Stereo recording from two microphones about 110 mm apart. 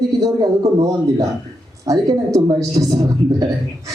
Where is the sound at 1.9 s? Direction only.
35° right (ahead or behind).